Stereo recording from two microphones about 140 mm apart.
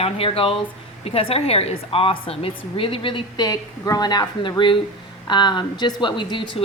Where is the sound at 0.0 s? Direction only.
40° left (ahead or behind).